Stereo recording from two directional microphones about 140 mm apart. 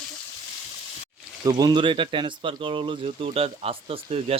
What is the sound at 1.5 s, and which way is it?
Speech, 25° right (ahead or behind).